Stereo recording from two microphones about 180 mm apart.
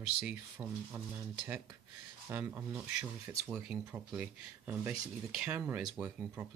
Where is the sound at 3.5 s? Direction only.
Centre (ahead or behind).